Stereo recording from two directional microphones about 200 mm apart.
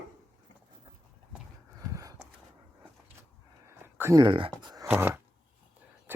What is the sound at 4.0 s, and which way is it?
Speech, 15° right (ahead or behind).